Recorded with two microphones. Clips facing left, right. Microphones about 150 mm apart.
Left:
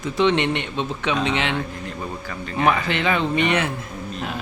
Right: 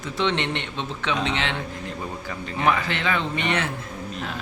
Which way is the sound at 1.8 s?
20° right (ahead or behind).